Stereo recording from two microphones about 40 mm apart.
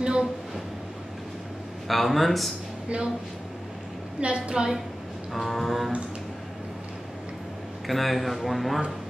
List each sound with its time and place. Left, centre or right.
0.0 s a sound: right
1.9 s speech: centre
4.2 s a woman's voice: right
5.3 s speech: centre
7.8 s speech: centre